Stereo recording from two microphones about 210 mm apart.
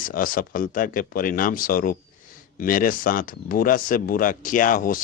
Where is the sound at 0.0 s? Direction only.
40° left (ahead or behind).